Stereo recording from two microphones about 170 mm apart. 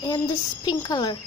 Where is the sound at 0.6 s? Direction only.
20° left (ahead or behind).